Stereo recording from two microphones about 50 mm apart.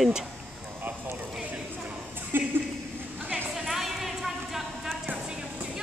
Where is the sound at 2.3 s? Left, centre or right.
Right.